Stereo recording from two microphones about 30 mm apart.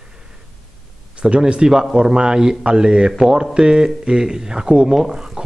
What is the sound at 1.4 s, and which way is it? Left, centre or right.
Speech, right.